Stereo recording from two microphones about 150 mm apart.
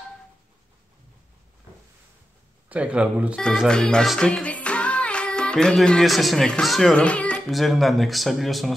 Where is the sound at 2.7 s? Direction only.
10° right (ahead or behind).